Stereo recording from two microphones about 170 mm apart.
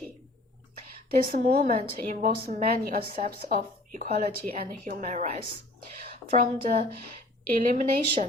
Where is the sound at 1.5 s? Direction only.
50° right (ahead or behind).